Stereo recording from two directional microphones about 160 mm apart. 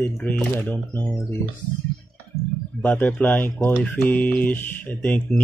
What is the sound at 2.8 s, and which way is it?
Speech, 10° left (ahead or behind).